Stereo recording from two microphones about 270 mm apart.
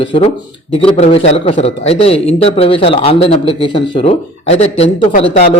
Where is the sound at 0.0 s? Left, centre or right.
Centre.